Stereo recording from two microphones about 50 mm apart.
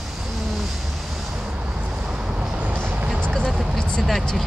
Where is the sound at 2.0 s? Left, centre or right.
Centre.